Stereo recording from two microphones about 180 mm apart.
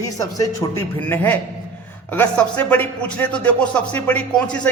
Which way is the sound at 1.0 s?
10° left (ahead or behind).